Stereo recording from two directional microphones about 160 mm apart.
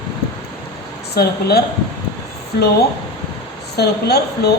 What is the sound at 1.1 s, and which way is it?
Speech, 85° left.